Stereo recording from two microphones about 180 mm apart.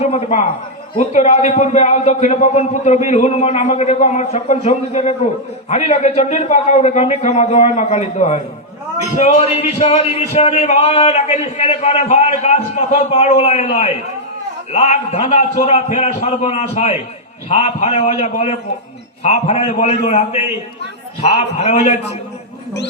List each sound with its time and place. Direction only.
0.0 s a man's voice: 35° left (ahead or behind)